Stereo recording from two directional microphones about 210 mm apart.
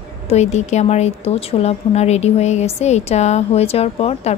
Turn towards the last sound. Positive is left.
turn(degrees=30)  # may be behind; listen again after turning